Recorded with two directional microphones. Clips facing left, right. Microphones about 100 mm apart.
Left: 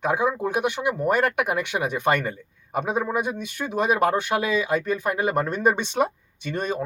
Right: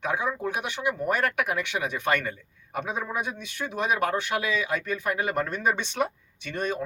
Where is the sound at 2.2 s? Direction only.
15° left (ahead or behind).